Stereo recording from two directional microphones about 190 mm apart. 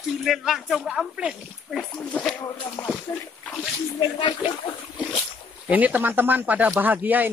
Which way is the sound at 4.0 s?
25° left (ahead or behind).